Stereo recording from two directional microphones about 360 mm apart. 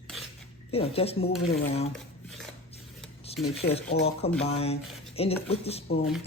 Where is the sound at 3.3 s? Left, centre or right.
Centre.